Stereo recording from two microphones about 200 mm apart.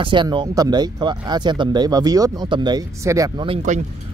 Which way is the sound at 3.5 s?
35° right (ahead or behind).